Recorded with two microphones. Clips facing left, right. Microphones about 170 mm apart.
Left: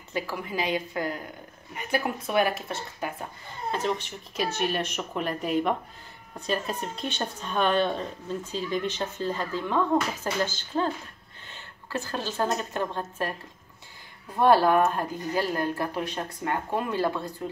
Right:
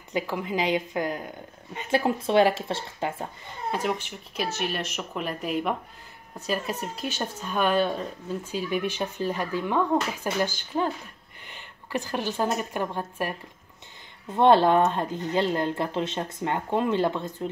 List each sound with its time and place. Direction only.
0.1 s a woman's voice: 20° right (ahead or behind)
3.7 s speech: 10° right (ahead or behind)
14.3 s a woman's voice: 25° right (ahead or behind)